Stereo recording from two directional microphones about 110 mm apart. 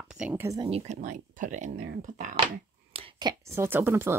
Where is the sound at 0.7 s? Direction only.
90° right.